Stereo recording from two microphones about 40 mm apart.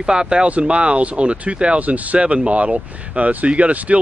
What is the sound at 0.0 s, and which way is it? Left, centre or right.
Speech, right.